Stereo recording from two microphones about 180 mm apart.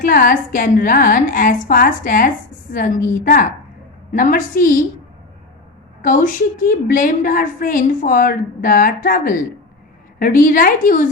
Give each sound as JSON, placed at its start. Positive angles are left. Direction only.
{"t": 0.0, "sound": "a woman's voice", "side_deg": 50}
{"t": 6.0, "sound": "a woman's voice", "side_deg": 50}